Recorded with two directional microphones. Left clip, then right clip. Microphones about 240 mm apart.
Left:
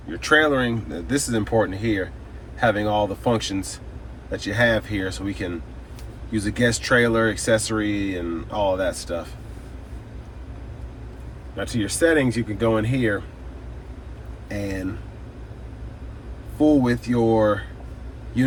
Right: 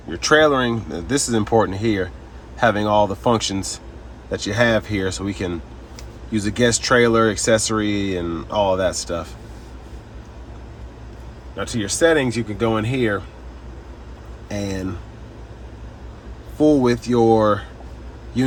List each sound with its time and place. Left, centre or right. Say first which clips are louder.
0.2 s speech: right 3 dB; centre
11.5 s speech: right 2 dB; centre
14.5 s speech: right 2 dB; centre
16.8 s speech: right 5 dB; centre